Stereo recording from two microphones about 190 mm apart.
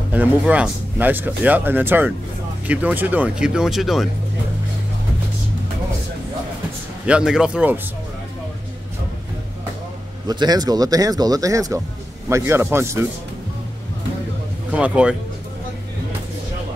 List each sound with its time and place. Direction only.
0.1 s speech: 10° right (ahead or behind)
7.1 s speech: 5° right (ahead or behind)
10.2 s speech: 20° right (ahead or behind)
14.7 s speech: 5° right (ahead or behind)